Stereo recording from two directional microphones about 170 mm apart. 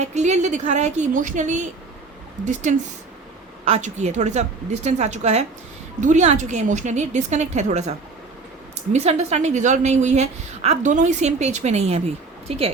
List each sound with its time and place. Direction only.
0.0 s a woman's voice: 40° right (ahead or behind)
8.9 s a woman's voice: 40° right (ahead or behind)